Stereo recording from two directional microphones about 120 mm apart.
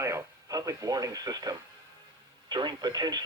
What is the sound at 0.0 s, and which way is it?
Radio, 25° right (ahead or behind).